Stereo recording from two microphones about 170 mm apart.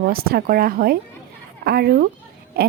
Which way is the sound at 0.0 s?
60° right (ahead or behind).